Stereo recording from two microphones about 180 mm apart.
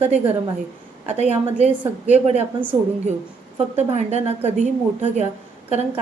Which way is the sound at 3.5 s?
40° right (ahead or behind).